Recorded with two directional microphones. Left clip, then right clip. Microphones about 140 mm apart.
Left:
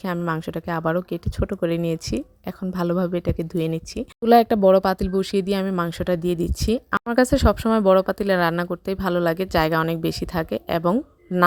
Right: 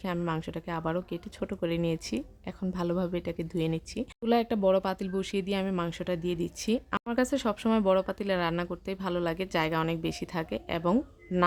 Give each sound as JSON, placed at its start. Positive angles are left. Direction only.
{"t": 0.3, "sound": "speech", "side_deg": 40}